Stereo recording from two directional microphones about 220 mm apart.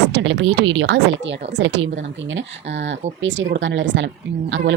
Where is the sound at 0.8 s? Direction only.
55° right (ahead or behind).